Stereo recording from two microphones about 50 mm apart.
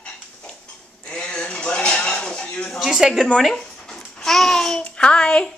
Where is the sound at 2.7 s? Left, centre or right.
Centre.